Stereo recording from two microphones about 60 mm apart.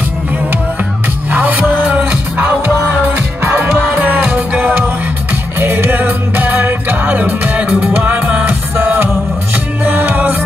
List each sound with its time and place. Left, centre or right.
1.3 s music: right
5.6 s music: right